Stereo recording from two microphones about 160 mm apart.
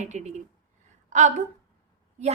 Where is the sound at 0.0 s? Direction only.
45° right (ahead or behind).